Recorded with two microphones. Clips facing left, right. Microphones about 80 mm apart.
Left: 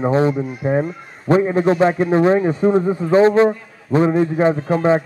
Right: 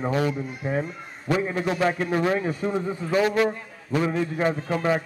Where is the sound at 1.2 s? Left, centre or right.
Left.